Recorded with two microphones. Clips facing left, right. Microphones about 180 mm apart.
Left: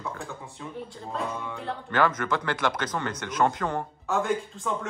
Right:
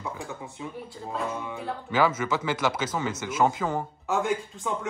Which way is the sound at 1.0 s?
5° right (ahead or behind).